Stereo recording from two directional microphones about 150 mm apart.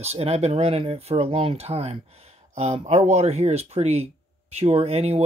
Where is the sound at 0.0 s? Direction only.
45° right (ahead or behind).